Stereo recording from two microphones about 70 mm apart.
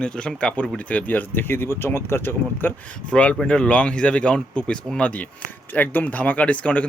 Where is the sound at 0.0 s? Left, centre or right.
Centre; by 2.7 s left.